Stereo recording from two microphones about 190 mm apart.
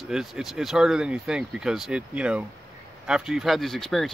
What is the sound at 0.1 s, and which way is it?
Speech, centre (ahead or behind).